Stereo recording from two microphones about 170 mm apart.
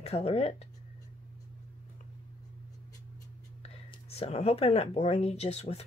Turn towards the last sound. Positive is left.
turn(degrees=40)  # may be behind; listen again after turning